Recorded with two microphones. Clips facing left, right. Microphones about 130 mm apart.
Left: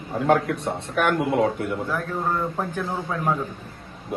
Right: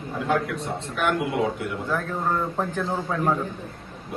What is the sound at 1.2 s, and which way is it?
A man's voice, centre (ahead or behind).